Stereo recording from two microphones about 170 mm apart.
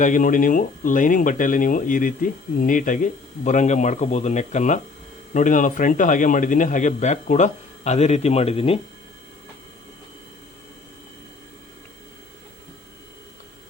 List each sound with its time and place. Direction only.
0.0 s speech: 50° left (ahead or behind)